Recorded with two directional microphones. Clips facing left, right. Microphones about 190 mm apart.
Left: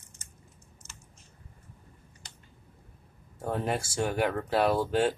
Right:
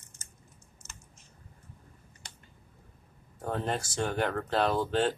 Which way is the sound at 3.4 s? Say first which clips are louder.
Left 2 dB; 10° left (ahead or behind).